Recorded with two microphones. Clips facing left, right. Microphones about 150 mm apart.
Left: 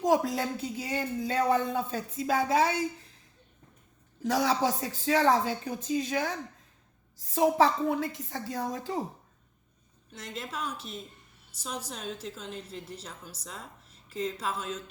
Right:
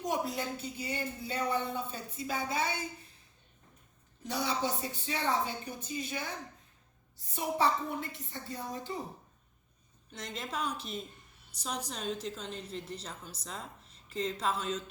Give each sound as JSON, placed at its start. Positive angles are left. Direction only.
{"t": 0.0, "sound": "speech", "side_deg": 90}
{"t": 4.2, "sound": "speech", "side_deg": 90}
{"t": 10.1, "sound": "a woman's voice", "side_deg": 5}